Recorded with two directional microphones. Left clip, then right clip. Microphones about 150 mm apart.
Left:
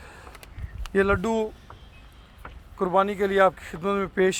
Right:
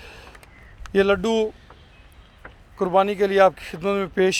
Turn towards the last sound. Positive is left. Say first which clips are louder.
# right 3 dB
turn(degrees=-65)  # may be behind; listen again after turning